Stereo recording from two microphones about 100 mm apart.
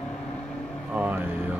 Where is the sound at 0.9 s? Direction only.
15° right (ahead or behind).